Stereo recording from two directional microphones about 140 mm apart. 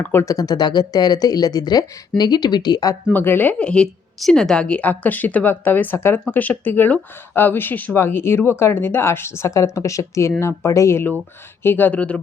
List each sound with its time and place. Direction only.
0.0 s speech: 15° left (ahead or behind)
3.1 s a woman's voice: 15° left (ahead or behind)